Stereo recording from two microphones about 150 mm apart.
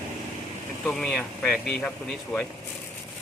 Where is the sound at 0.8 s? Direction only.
5° left (ahead or behind).